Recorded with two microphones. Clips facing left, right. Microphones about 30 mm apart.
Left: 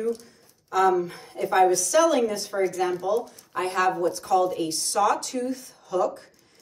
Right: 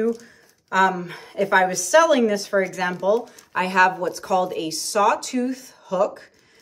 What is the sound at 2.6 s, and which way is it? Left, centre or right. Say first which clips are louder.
Speech: right 3 dB; right.